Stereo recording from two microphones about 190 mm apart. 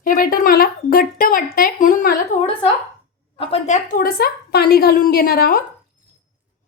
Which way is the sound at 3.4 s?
35° left (ahead or behind).